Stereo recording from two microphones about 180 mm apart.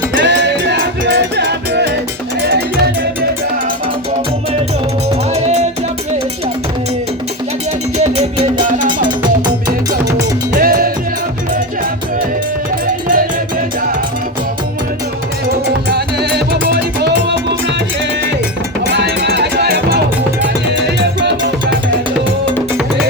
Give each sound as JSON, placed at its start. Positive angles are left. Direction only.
{"t": 0.2, "sound": "music", "side_deg": -75}
{"t": 5.3, "sound": "music", "side_deg": -35}
{"t": 7.9, "sound": "music", "side_deg": -35}
{"t": 9.0, "sound": "music", "side_deg": -20}
{"t": 10.6, "sound": "music", "side_deg": -55}
{"t": 15.4, "sound": "music", "side_deg": -65}
{"t": 18.9, "sound": "music", "side_deg": -70}
{"t": 21.0, "sound": "music", "side_deg": -70}